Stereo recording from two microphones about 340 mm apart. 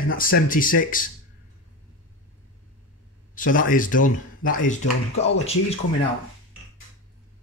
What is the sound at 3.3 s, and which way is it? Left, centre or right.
A man's voice, left.